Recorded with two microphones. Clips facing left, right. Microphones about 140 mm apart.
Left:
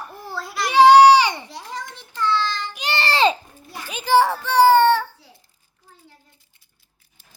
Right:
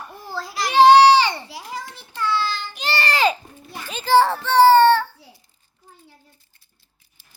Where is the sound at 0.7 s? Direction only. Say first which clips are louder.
Left 1 dB; 10° left (ahead or behind).